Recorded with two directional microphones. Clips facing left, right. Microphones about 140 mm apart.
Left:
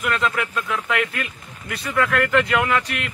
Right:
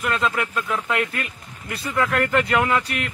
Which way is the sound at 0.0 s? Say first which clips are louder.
Even; 35° right (ahead or behind).